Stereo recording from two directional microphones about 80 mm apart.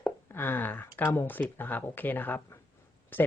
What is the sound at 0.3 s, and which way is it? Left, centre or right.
Speech, left.